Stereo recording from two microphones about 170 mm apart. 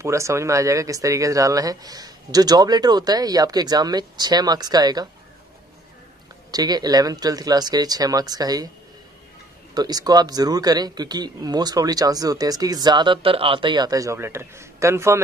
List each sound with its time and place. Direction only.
0.0 s speech: 15° right (ahead or behind)
6.5 s speech: 25° right (ahead or behind)
9.8 s speech: 25° right (ahead or behind)